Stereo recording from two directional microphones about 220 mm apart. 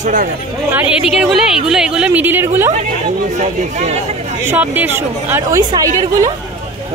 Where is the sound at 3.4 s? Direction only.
30° right (ahead or behind).